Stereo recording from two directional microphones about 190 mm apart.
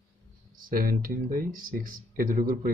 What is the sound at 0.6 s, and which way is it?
Speech, 45° right (ahead or behind).